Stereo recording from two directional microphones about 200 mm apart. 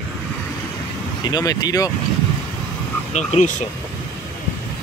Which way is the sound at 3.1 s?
35° left (ahead or behind).